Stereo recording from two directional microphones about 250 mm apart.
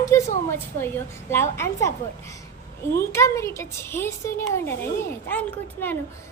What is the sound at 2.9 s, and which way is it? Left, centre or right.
A woman's voice, centre.